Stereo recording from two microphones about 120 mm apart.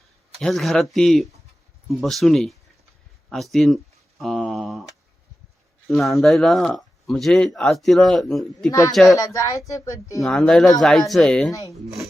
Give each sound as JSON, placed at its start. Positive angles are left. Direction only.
{"t": 0.3, "sound": "speech", "side_deg": 0}
{"t": 5.9, "sound": "speech", "side_deg": 0}
{"t": 9.1, "sound": "speech", "side_deg": 30}
{"t": 10.2, "sound": "speech", "side_deg": 5}